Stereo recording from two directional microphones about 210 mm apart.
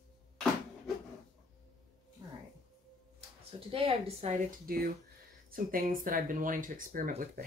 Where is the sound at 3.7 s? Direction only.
25° right (ahead or behind).